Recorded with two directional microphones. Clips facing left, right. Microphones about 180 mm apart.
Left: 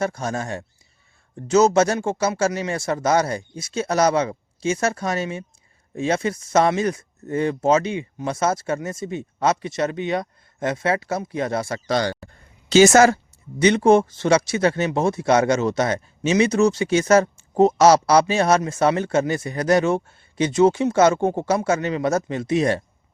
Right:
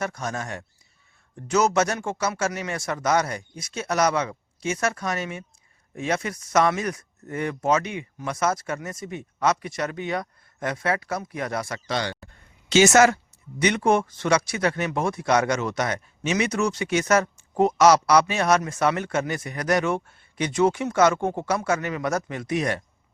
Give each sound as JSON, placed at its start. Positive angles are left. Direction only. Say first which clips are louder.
{"t": 0.0, "sound": "speech", "louder": "left 5 dB", "side_deg": 30}